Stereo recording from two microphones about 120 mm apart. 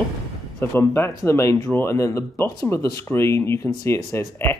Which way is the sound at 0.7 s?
20° left (ahead or behind).